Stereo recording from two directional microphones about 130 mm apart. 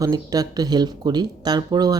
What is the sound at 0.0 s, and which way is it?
Speech, 30° right (ahead or behind).